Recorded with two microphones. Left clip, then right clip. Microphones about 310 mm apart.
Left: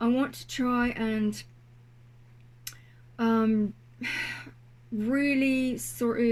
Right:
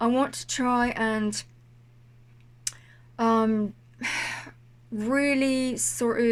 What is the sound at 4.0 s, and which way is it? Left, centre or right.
Gasp, centre.